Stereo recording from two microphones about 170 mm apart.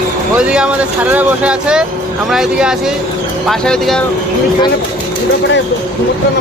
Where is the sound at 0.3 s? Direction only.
5° right (ahead or behind).